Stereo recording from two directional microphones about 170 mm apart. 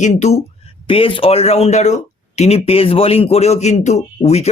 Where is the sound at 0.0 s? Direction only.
40° left (ahead or behind).